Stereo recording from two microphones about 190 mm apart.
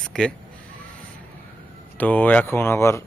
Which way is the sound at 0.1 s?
5° left (ahead or behind).